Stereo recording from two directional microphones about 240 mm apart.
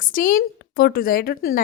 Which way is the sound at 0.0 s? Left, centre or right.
Left.